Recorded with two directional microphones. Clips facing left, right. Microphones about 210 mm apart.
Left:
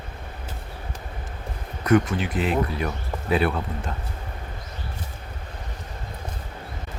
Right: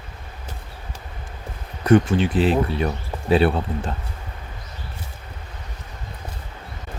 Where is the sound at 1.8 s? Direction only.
30° right (ahead or behind).